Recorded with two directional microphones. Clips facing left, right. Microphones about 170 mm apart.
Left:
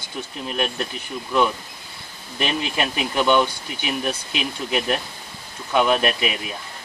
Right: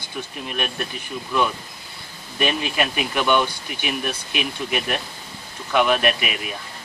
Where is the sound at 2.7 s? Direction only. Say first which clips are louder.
Even; 25° left (ahead or behind).